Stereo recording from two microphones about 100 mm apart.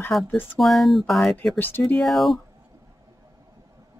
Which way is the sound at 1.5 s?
20° left (ahead or behind).